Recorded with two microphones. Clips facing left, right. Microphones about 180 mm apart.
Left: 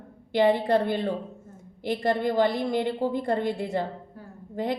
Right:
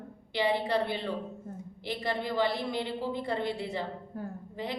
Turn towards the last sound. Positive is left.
turn(degrees=50)  # may be behind; listen again after turning